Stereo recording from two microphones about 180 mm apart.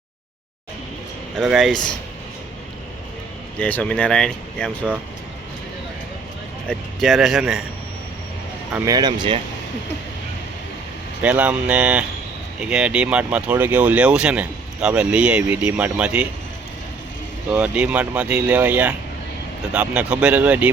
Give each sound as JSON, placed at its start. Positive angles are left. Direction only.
{"t": 1.4, "sound": "speech", "side_deg": 0}
{"t": 3.6, "sound": "speech", "side_deg": 10}
{"t": 6.7, "sound": "speech", "side_deg": 0}
{"t": 8.8, "sound": "speech", "side_deg": -20}
{"t": 11.2, "sound": "speech", "side_deg": -10}
{"t": 17.5, "sound": "speech", "side_deg": -5}